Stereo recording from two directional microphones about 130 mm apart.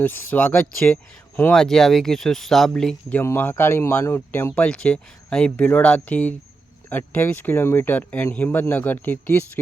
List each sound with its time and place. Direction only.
0.0 s speech: 10° left (ahead or behind)
3.2 s speech: 15° left (ahead or behind)